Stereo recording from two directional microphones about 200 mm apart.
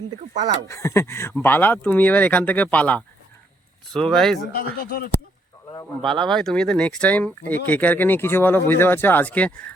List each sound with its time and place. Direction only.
0.7 s speech: 15° left (ahead or behind)
4.5 s speech: 50° left (ahead or behind)
6.0 s speech: centre (ahead or behind)